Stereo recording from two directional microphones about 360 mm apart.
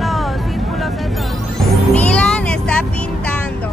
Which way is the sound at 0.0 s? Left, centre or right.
Centre.